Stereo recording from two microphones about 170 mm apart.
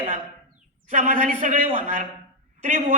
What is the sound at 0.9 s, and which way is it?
A man's voice, 50° right (ahead or behind).